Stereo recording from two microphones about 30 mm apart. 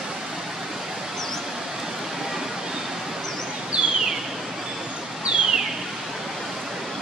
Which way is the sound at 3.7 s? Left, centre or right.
Right.